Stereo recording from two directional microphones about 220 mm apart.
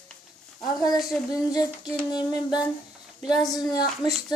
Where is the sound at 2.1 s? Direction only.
20° left (ahead or behind).